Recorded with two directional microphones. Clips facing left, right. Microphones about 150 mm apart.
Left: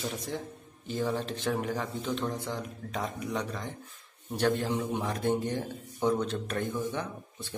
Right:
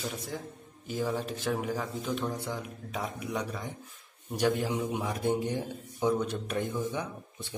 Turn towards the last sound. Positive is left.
turn(degrees=-15)  # may be behind; listen again after turning